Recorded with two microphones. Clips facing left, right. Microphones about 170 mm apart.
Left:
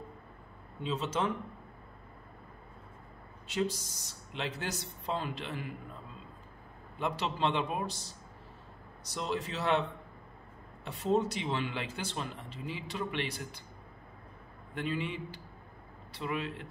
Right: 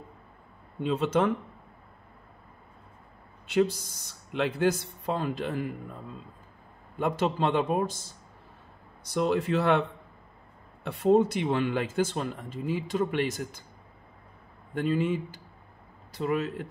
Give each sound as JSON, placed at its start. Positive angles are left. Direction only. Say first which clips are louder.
{"t": 0.8, "sound": "speech", "louder": "right 8 dB", "side_deg": -55}
{"t": 3.4, "sound": "speech", "louder": "right 8 dB", "side_deg": -60}
{"t": 7.0, "sound": "speech", "louder": "right 6 dB", "side_deg": -45}
{"t": 14.7, "sound": "speech", "louder": "right 9 dB", "side_deg": -45}